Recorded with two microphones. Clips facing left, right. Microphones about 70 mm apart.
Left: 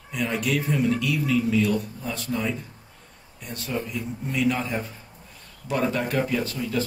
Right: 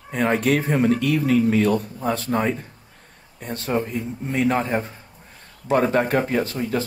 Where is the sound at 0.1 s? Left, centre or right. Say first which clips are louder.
Right 6 dB; right.